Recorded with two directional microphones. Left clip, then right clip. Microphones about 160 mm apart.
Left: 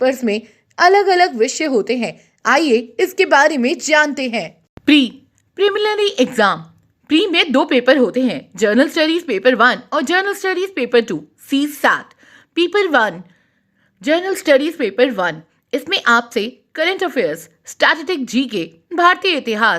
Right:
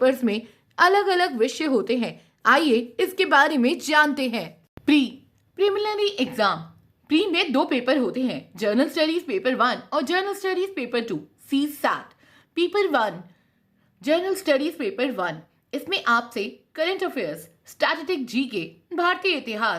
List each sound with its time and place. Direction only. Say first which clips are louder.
0.0 s a woman's voice: left 4 dB; 15° left (ahead or behind)
4.9 s a woman's voice: left 8 dB; 30° left (ahead or behind)